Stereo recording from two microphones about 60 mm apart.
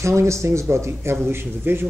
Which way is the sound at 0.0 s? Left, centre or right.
Right.